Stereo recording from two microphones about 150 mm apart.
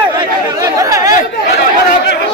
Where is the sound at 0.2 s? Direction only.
25° right (ahead or behind).